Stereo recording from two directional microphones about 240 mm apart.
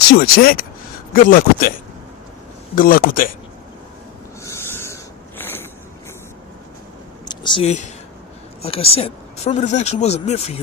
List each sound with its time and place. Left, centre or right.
0.1 s a man's voice: left
2.7 s a man's voice: left
4.4 s a sound: centre
7.3 s speech: centre